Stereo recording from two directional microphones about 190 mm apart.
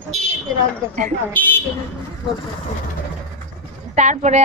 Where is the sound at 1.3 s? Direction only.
10° left (ahead or behind).